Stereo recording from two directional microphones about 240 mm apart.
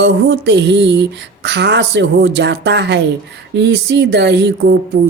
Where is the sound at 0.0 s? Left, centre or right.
Right.